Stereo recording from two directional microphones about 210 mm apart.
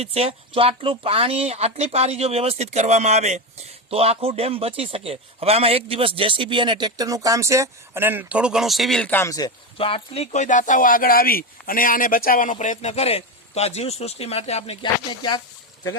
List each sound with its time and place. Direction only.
0.0 s speech: 30° right (ahead or behind); by 15.4 s 20° left (ahead or behind)